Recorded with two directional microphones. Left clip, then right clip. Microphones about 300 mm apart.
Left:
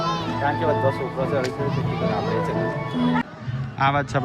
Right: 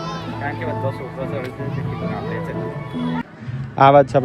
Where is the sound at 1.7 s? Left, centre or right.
Left.